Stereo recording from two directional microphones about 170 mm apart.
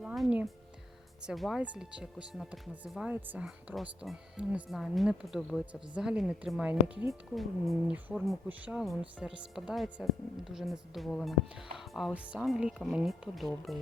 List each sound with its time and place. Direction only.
0.0 s music: 5° right (ahead or behind)
1.2 s speech: centre (ahead or behind)